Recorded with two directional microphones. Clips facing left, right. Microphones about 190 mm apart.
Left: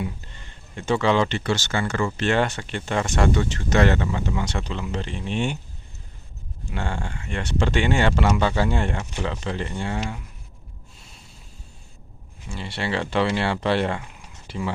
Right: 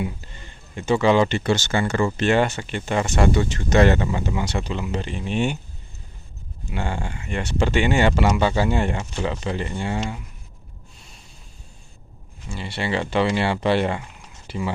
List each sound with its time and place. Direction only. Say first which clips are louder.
0.8 s speech: right 3 dB; 5° right (ahead or behind)
2.3 s speech: right 3 dB; 5° right (ahead or behind)
6.7 s speech: right 2 dB; 5° right (ahead or behind)
12.5 s speech: right 2 dB; centre (ahead or behind)
14.4 s a sound: right 1 dB; centre (ahead or behind)